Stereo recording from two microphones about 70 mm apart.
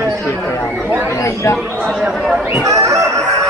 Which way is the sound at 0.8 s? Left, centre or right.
Right.